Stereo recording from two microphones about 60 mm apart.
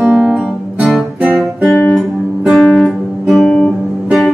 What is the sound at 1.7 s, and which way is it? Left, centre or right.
Guitar, centre.